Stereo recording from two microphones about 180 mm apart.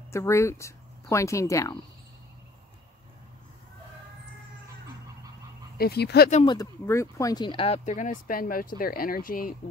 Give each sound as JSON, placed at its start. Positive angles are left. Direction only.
{"t": 0.1, "sound": "speech", "side_deg": 15}
{"t": 5.8, "sound": "speech", "side_deg": 65}
{"t": 6.4, "sound": "speech", "side_deg": 20}